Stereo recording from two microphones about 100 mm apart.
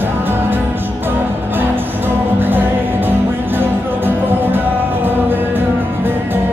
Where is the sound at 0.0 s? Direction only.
20° right (ahead or behind).